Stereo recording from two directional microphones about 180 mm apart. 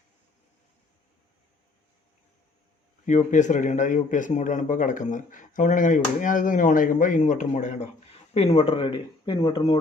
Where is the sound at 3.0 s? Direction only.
45° left (ahead or behind).